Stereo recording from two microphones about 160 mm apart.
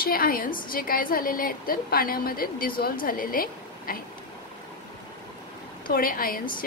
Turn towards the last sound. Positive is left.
turn(degrees=60)  # may be behind; listen again after turning